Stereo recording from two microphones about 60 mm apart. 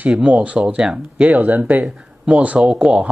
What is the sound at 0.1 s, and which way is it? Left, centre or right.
Speech, right.